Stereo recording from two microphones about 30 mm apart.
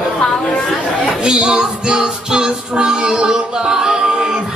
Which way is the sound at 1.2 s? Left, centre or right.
Right.